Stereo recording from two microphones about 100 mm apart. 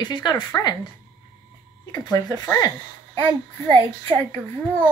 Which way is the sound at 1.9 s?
40° left (ahead or behind).